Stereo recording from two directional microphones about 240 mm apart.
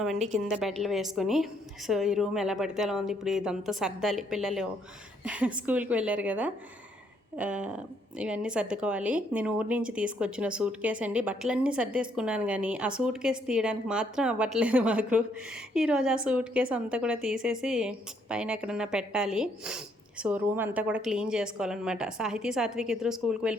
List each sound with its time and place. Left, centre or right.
0.0 s a woman's voice: centre